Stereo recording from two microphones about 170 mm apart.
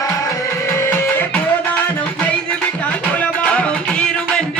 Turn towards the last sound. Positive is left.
turn(degrees=5)  # may be behind; listen again after turning